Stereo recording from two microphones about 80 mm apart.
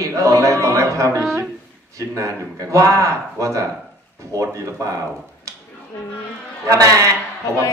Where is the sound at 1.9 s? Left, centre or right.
Right.